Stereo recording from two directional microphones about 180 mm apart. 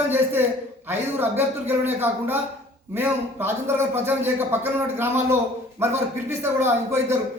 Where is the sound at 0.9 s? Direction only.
10° right (ahead or behind).